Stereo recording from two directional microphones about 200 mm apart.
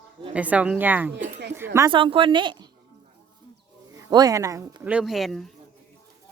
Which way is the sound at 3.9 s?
20° right (ahead or behind).